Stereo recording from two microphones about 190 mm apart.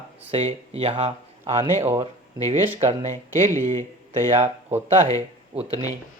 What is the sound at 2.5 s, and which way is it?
Speech, 30° right (ahead or behind).